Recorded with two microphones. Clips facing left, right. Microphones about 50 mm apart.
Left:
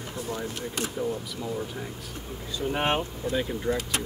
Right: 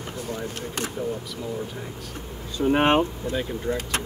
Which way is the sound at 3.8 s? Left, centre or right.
Right.